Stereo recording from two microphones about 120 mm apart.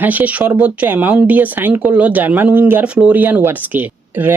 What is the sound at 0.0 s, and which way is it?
Speech, 15° right (ahead or behind).